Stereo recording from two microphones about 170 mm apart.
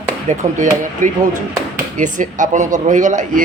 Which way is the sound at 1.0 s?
50° right (ahead or behind).